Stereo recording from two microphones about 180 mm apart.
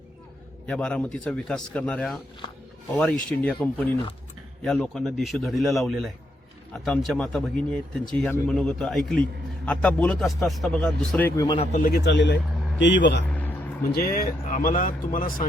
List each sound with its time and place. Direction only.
0.7 s speech: 5° left (ahead or behind)
11.4 s speech: 25° left (ahead or behind)
11.7 s a man's voice: 55° left (ahead or behind); by 13.2 s 75° left (ahead or behind)
13.2 s vehicle: 10° left (ahead or behind)
13.9 s speech: 55° left (ahead or behind)